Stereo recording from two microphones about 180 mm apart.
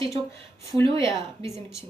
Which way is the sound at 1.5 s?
Centre (ahead or behind).